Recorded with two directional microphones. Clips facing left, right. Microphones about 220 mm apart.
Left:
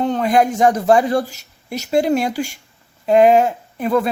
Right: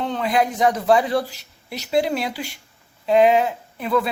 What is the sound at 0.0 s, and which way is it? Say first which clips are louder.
Speech: left 5 dB; 45° left (ahead or behind).